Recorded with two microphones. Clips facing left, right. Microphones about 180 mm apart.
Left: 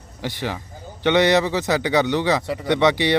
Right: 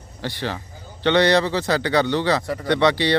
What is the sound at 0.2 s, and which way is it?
Speech, 15° left (ahead or behind).